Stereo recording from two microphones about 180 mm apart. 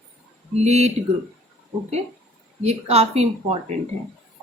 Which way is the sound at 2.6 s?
35° right (ahead or behind).